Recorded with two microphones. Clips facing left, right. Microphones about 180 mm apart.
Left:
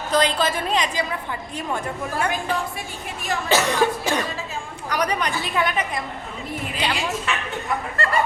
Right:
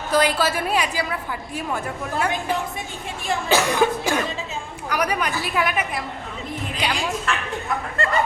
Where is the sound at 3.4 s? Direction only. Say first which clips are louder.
Right 1 dB; 10° right (ahead or behind); by 7.4 s 5° left (ahead or behind).